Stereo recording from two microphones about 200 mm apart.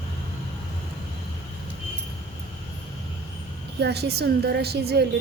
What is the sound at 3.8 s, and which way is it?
A woman's voice, 55° right (ahead or behind).